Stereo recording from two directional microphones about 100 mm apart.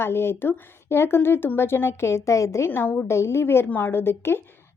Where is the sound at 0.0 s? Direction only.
25° left (ahead or behind).